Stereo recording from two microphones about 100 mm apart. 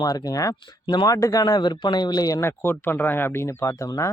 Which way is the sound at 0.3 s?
35° left (ahead or behind).